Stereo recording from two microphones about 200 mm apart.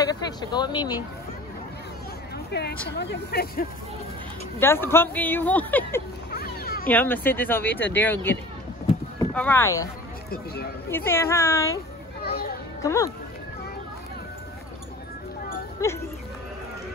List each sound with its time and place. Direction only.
0.1 s speech: 20° left (ahead or behind)
2.3 s a sound: 55° left (ahead or behind)
2.9 s speech: 55° left (ahead or behind)
4.6 s speech: 10° left (ahead or behind)
6.3 s a sound: 50° left (ahead or behind)
6.9 s speech: 10° left (ahead or behind)
10.3 s speech: 50° left (ahead or behind)
10.9 s speech: 10° left (ahead or behind)
12.2 s children playing: 50° left (ahead or behind)
12.8 s speech: 15° left (ahead or behind)
15.8 s speech: 15° left (ahead or behind)